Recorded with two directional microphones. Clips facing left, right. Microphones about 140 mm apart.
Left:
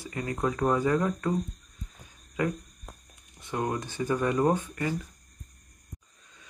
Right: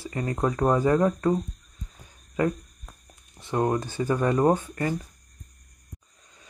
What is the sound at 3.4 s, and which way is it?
Speech, 35° right (ahead or behind).